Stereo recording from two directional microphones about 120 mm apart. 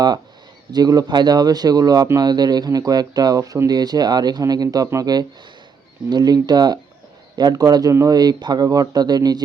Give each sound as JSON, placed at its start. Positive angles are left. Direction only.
{"t": 0.7, "sound": "speech", "side_deg": -35}